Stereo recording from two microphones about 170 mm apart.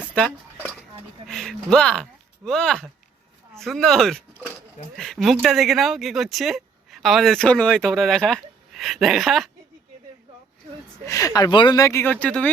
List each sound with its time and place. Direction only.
0.0 s a sound: 10° left (ahead or behind)
1.3 s speech: centre (ahead or behind)
11.0 s speech: 20° left (ahead or behind)